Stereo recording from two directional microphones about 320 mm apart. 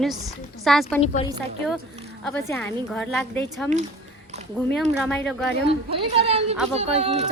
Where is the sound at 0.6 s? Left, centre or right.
Centre.